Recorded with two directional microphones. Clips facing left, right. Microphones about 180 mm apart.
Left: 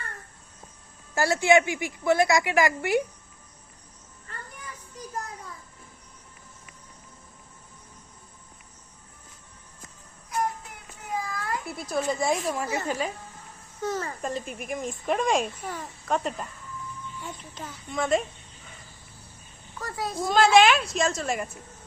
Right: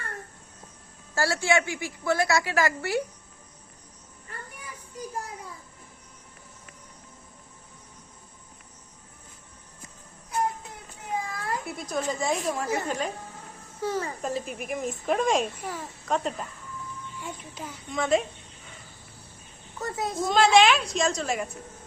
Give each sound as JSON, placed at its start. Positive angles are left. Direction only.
{"t": 1.1, "sound": "a woman's voice", "side_deg": 20}
{"t": 4.3, "sound": "a sound", "side_deg": -10}
{"t": 11.0, "sound": "a sound", "side_deg": -25}
{"t": 11.7, "sound": "speech", "side_deg": 5}
{"t": 13.8, "sound": "a child's voice", "side_deg": -10}
{"t": 17.2, "sound": "a child's voice", "side_deg": -10}
{"t": 17.9, "sound": "speech", "side_deg": 0}
{"t": 19.8, "sound": "a woman's voice", "side_deg": -20}
{"t": 20.2, "sound": "speech", "side_deg": 0}